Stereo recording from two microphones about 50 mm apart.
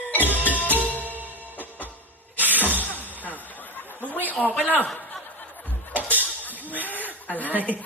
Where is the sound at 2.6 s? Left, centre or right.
Left.